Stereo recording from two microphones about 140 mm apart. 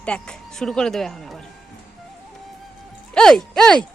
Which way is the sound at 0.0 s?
5° left (ahead or behind).